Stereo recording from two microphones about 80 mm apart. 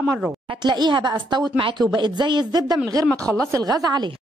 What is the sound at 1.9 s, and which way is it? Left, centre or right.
Speech, right.